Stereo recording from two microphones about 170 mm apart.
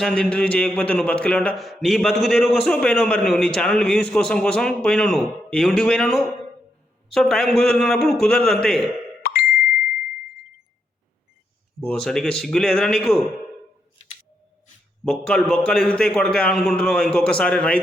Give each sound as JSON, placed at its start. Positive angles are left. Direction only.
{"t": 0.0, "sound": "a man's voice", "side_deg": 5}
{"t": 9.2, "sound": "plop", "side_deg": 65}
{"t": 11.9, "sound": "a man's voice", "side_deg": 5}
{"t": 15.2, "sound": "a man's voice", "side_deg": 5}